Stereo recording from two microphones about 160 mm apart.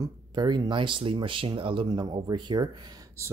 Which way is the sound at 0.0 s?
25° right (ahead or behind).